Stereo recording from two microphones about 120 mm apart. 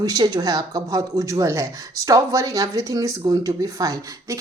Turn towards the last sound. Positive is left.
turn(degrees=-30)  # may be behind; listen again after turning